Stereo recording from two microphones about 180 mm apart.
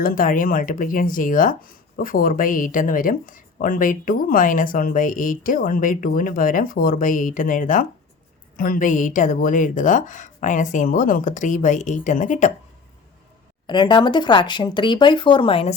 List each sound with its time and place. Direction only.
0.0 s speech: 50° left (ahead or behind)
13.7 s speech: 25° left (ahead or behind)